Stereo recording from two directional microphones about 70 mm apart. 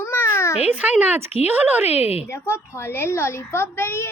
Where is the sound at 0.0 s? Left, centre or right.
Left.